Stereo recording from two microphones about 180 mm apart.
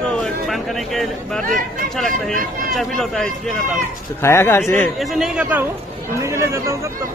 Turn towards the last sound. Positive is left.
turn(degrees=-15)  # may be behind; listen again after turning